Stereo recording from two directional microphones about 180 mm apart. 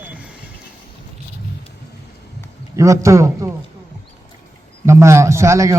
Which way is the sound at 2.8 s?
15° right (ahead or behind).